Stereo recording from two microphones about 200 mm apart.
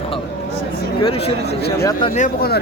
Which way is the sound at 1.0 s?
25° left (ahead or behind).